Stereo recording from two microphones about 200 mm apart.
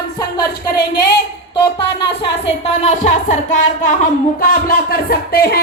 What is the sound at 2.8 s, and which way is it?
Speech, 40° left (ahead or behind).